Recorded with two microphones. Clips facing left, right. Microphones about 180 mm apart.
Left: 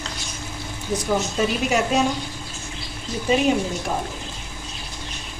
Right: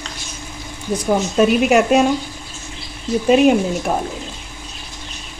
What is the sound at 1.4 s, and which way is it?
Speech, 65° right (ahead or behind).